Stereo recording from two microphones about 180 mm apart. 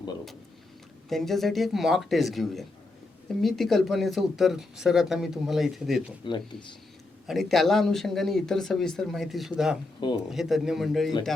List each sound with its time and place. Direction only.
1.1 s speech: centre (ahead or behind)
6.2 s speech: 25° left (ahead or behind)
7.3 s speech: centre (ahead or behind)